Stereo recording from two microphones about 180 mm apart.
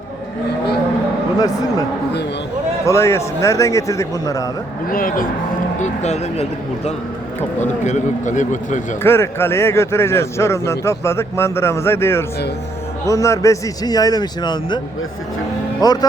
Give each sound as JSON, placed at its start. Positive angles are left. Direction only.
{"t": 2.8, "sound": "speech", "side_deg": 15}
{"t": 4.9, "sound": "a man's voice", "side_deg": 50}
{"t": 5.8, "sound": "a man's voice", "side_deg": 40}
{"t": 9.0, "sound": "a man's voice", "side_deg": 15}
{"t": 15.8, "sound": "a man's voice", "side_deg": 20}